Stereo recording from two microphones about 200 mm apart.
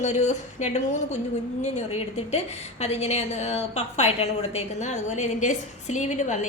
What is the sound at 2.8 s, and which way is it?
A woman's voice, 30° left (ahead or behind).